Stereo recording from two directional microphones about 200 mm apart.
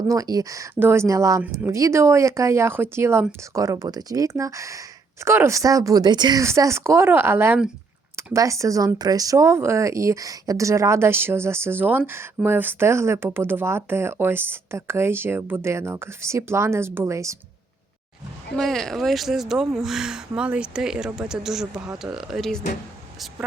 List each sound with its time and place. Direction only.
0.1 s speech: 15° right (ahead or behind)
18.5 s speech: centre (ahead or behind)